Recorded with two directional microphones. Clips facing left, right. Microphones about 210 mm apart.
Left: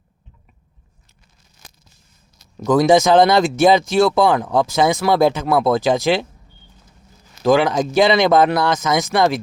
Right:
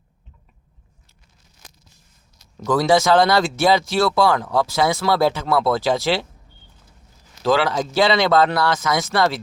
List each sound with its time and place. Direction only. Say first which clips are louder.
2.6 s speech: left 4 dB; 15° left (ahead or behind)
7.4 s speech: left 4 dB; 15° left (ahead or behind)